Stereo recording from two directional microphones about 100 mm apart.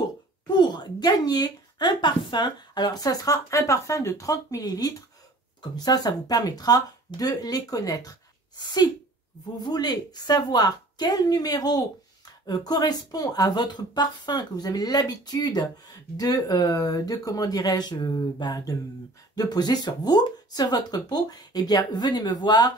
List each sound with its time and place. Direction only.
0.5 s a woman's voice: 45° left (ahead or behind)